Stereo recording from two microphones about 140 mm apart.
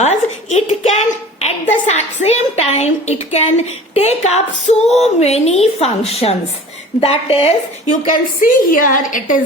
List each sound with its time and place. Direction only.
0.0 s a woman's voice: 55° left (ahead or behind)
8.1 s a woman's voice: 80° left